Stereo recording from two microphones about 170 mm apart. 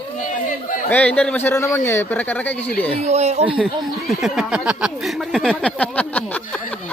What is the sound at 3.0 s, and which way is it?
Speech, 40° right (ahead or behind).